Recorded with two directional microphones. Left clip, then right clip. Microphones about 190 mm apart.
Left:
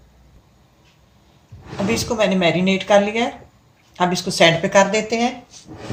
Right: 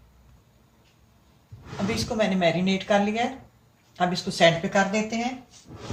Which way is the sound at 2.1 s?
30° left (ahead or behind).